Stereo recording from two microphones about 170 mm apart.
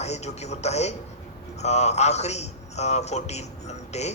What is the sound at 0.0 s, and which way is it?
Speech, 40° left (ahead or behind).